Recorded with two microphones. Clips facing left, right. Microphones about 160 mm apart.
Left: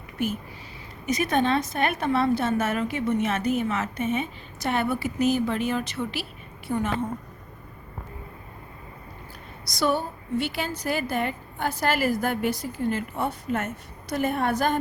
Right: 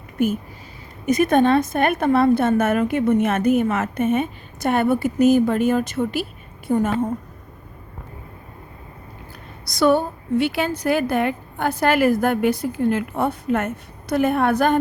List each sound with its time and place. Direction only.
0.2 s a woman's voice: 50° right (ahead or behind)
9.7 s a woman's voice: 55° right (ahead or behind)